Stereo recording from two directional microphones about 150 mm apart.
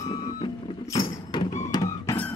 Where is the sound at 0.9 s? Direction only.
30° left (ahead or behind).